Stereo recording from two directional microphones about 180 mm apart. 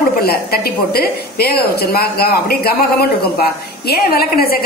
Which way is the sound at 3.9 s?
55° left (ahead or behind).